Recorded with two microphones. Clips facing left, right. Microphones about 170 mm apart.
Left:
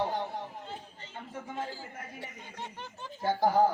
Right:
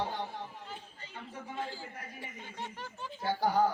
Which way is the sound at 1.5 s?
45° left (ahead or behind).